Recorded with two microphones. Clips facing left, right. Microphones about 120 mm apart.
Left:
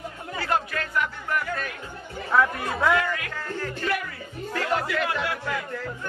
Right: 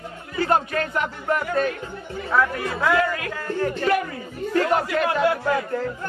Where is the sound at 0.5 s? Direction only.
30° right (ahead or behind).